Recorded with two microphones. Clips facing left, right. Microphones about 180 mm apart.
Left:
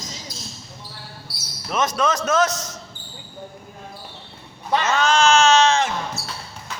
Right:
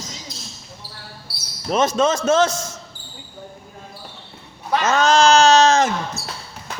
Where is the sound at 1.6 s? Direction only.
30° right (ahead or behind).